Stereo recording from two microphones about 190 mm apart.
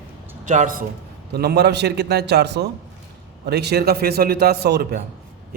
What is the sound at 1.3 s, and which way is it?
A man's voice, 55° right (ahead or behind).